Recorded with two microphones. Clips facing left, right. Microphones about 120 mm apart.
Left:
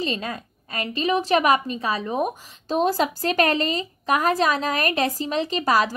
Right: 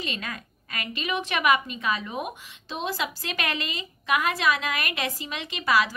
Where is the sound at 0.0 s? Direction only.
30° left (ahead or behind).